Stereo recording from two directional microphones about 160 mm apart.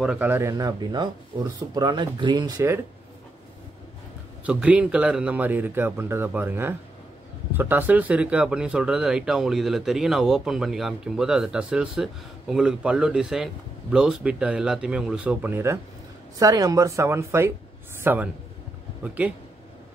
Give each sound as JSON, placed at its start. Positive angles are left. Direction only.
{"t": 0.0, "sound": "speech", "side_deg": -5}
{"t": 4.5, "sound": "speech", "side_deg": -10}